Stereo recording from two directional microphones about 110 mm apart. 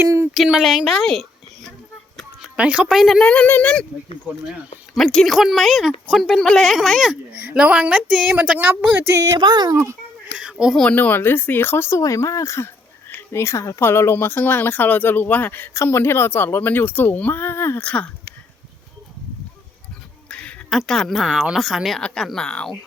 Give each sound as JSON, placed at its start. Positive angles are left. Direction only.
{"t": 0.0, "sound": "a sound", "side_deg": -25}
{"t": 0.3, "sound": "speech", "side_deg": -5}
{"t": 2.6, "sound": "a woman's voice", "side_deg": -10}
{"t": 3.2, "sound": "speech", "side_deg": 15}
{"t": 4.9, "sound": "a woman's voice", "side_deg": 0}
{"t": 9.1, "sound": "speech", "side_deg": -35}
{"t": 10.3, "sound": "a sound", "side_deg": -5}
{"t": 10.8, "sound": "speech", "side_deg": 15}
{"t": 17.8, "sound": "speech", "side_deg": 10}
{"t": 20.2, "sound": "a sound", "side_deg": 10}
{"t": 20.7, "sound": "speech", "side_deg": 0}